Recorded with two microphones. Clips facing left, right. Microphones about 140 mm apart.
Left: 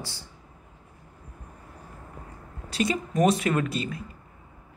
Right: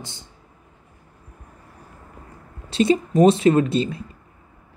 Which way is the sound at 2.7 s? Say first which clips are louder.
Right 9 dB; 25° right (ahead or behind).